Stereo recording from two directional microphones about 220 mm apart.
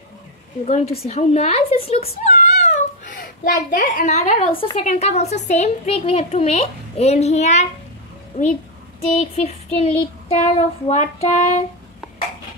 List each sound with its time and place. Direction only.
1.0 s speech: 30° left (ahead or behind)
9.0 s speech: 30° left (ahead or behind)